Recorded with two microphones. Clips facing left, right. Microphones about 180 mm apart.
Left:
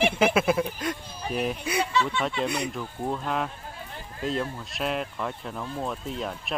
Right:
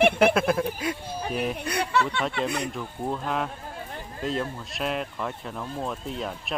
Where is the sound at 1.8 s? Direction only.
65° right (ahead or behind).